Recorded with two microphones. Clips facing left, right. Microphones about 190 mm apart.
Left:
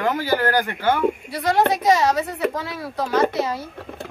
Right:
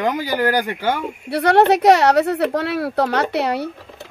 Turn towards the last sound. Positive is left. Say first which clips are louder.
# right 1 dB
turn(degrees=-70)  # may be behind; listen again after turning